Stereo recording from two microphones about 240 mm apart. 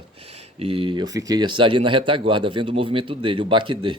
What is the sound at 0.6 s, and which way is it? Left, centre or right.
Speech, right.